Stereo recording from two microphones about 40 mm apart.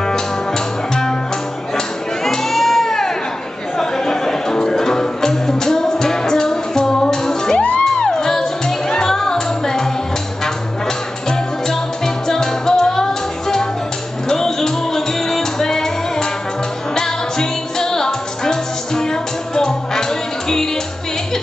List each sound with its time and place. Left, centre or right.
0.0 s music: centre
2.2 s music: centre
7.5 s music: left
7.8 s music: centre
11.2 s music: centre